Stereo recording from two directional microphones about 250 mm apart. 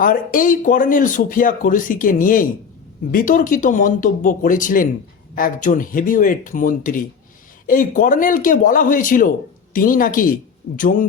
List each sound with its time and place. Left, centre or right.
0.0 s speech: left